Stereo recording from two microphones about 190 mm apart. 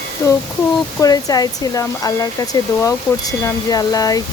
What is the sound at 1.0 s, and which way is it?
Speech, 20° left (ahead or behind).